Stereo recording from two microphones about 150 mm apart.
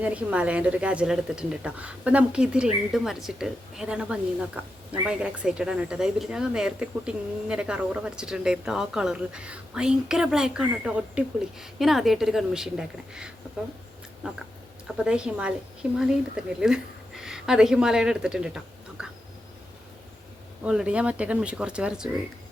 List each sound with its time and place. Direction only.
0.0 s a woman's voice: 10° right (ahead or behind)
14.8 s speech: 5° right (ahead or behind)
20.7 s speech: 5° right (ahead or behind)